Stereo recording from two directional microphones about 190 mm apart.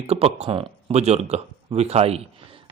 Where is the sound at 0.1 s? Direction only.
30° right (ahead or behind).